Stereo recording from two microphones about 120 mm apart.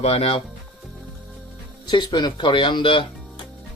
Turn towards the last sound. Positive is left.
turn(degrees=45)  # may be behind; listen again after turning